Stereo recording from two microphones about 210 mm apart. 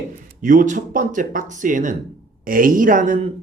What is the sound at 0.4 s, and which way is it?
Speech, 35° right (ahead or behind).